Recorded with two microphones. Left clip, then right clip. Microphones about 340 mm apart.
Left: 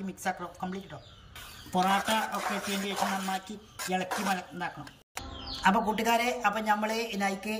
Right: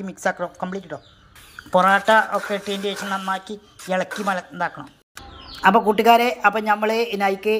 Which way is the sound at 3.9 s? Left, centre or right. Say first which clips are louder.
Right 8 dB; centre.